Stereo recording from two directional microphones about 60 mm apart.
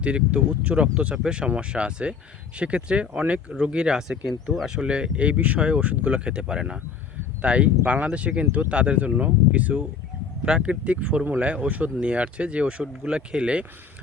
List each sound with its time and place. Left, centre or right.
0.0 s speech: centre